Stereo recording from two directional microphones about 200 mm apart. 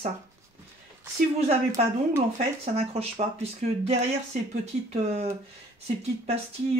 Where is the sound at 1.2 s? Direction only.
35° right (ahead or behind).